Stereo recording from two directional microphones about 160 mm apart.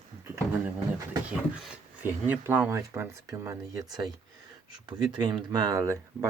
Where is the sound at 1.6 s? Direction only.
10° right (ahead or behind).